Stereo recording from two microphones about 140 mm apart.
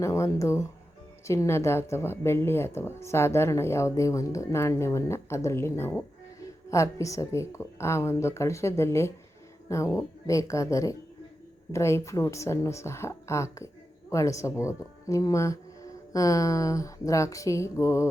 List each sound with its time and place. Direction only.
0.0 s a woman's voice: 20° left (ahead or behind)